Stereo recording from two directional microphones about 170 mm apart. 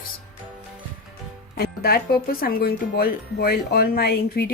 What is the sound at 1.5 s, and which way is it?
Speech, 65° left (ahead or behind).